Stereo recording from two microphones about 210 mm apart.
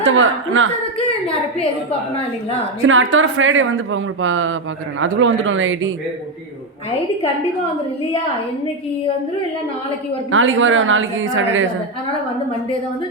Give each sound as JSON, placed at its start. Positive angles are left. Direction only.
{"t": 0.1, "sound": "speech", "side_deg": -70}
{"t": 2.8, "sound": "speech", "side_deg": -70}
{"t": 10.3, "sound": "speech", "side_deg": -70}